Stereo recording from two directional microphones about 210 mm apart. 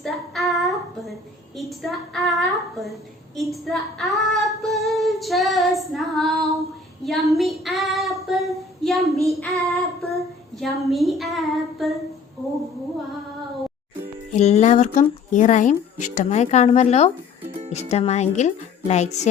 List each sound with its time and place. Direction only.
0.0 s child singing: centre (ahead or behind)
1.5 s a woman's voice: centre (ahead or behind)
7.0 s child singing: centre (ahead or behind)
10.6 s a woman's voice: centre (ahead or behind)
14.3 s speech: 30° left (ahead or behind)
17.4 s music: 25° right (ahead or behind)
17.8 s speech: 30° left (ahead or behind)